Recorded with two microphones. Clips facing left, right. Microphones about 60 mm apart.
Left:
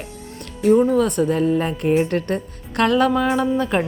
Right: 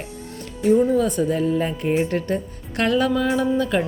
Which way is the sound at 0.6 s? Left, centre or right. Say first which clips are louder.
Left 2 dB; left.